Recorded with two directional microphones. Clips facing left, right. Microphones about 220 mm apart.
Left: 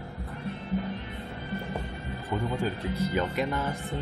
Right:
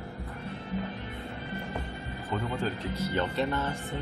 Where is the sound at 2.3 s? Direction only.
10° left (ahead or behind).